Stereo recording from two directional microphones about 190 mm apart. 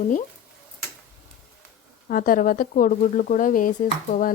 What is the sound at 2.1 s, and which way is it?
A woman's voice, 45° left (ahead or behind).